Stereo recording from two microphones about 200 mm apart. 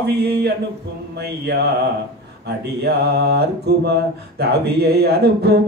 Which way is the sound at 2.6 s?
55° right (ahead or behind).